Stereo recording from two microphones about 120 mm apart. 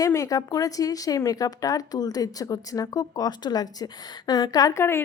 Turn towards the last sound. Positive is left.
turn(degrees=20)  # may be behind; listen again after turning